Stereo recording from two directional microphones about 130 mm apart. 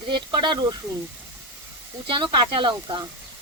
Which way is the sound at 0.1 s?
35° right (ahead or behind).